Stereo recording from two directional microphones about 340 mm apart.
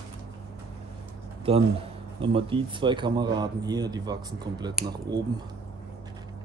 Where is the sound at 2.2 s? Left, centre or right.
Centre.